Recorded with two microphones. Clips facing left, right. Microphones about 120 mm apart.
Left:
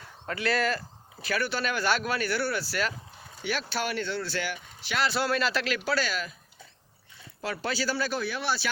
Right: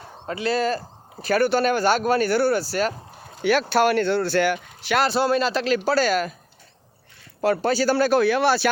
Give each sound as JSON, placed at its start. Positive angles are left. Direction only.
{"t": 0.3, "sound": "speech", "side_deg": -20}
{"t": 0.6, "sound": "a sound", "side_deg": -30}
{"t": 1.2, "sound": "speech", "side_deg": -50}
{"t": 3.4, "sound": "speech", "side_deg": -70}
{"t": 5.1, "sound": "speech", "side_deg": -25}
{"t": 7.4, "sound": "speech", "side_deg": -50}